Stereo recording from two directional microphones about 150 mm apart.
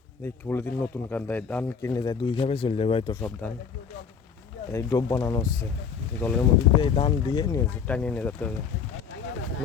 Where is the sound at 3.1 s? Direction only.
10° left (ahead or behind).